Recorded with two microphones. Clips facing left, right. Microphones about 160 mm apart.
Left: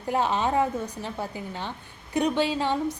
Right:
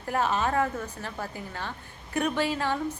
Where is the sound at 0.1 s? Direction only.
20° left (ahead or behind).